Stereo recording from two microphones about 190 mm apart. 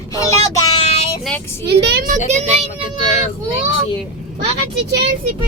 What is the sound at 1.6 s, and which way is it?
Speech, 60° right (ahead or behind).